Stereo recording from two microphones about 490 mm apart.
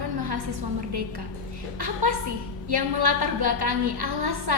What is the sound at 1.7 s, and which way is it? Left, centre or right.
A woman's voice, right.